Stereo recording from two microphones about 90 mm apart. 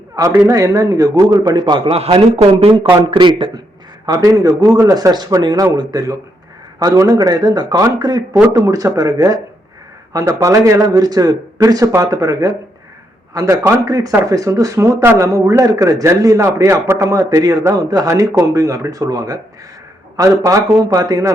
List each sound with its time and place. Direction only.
0.2 s a man's voice: 40° right (ahead or behind)
1.5 s a man's voice: 60° right (ahead or behind); by 2.8 s 90° right
2.9 s speech: 60° right (ahead or behind)
4.0 s a man's voice: 40° right (ahead or behind)
16.8 s a man's voice: 25° right (ahead or behind)
17.1 s a man's voice: 40° right (ahead or behind)